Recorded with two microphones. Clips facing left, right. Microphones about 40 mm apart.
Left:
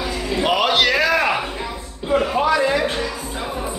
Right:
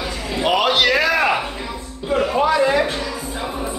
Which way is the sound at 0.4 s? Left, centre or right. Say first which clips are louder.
Right 1 dB; centre.